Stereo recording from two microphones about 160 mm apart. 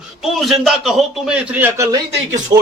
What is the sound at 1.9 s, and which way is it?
Speech, 25° right (ahead or behind).